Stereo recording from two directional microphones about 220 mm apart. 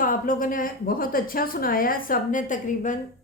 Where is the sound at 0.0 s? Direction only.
40° left (ahead or behind).